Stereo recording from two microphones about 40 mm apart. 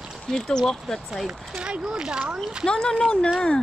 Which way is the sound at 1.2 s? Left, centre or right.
Right.